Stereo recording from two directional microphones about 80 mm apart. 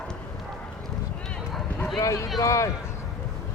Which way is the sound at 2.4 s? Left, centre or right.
Left.